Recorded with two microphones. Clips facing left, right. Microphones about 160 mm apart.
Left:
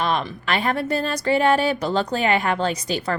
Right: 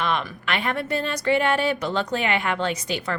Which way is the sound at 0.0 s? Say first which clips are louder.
Left 2 dB; 35° left (ahead or behind).